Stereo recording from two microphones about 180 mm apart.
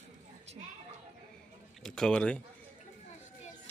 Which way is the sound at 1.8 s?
5° left (ahead or behind).